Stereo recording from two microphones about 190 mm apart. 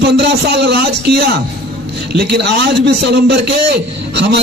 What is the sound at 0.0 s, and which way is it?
A man's voice, 60° right (ahead or behind).